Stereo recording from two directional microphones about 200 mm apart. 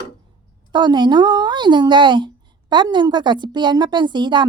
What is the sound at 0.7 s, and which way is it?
A woman's voice, 20° right (ahead or behind).